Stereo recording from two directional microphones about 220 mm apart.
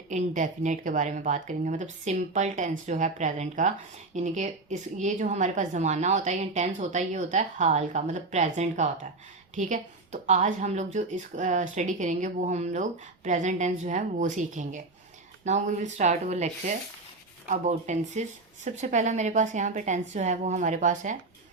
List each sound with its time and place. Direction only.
0.1 s a woman's voice: 35° right (ahead or behind)